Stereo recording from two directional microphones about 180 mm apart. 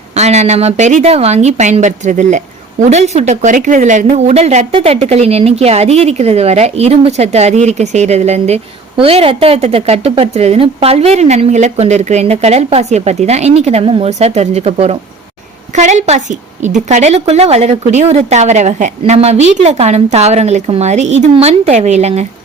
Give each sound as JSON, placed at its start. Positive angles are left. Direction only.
{"t": 0.2, "sound": "a woman's voice", "side_deg": -40}